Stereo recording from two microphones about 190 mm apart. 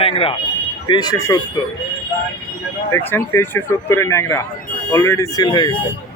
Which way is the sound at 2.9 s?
10° left (ahead or behind).